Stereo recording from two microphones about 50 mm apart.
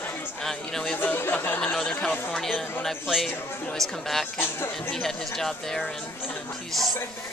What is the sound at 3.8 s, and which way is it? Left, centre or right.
Speech, centre.